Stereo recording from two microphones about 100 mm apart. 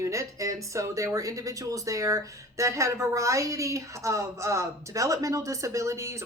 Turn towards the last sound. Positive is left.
turn(degrees=-30)  # may be behind; listen again after turning